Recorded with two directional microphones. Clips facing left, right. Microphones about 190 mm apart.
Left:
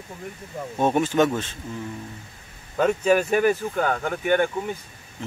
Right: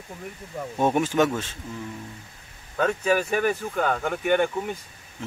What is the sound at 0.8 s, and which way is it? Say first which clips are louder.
Speech: left 1 dB; 10° right (ahead or behind).